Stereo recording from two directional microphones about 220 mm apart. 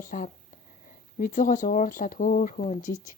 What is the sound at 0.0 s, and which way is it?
A woman's voice, 40° left (ahead or behind).